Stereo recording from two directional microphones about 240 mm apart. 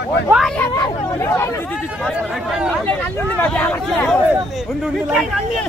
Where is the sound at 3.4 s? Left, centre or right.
Centre.